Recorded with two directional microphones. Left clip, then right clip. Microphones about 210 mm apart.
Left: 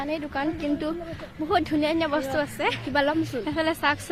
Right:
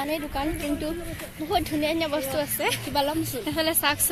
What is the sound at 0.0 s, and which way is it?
Speech, 5° right (ahead or behind).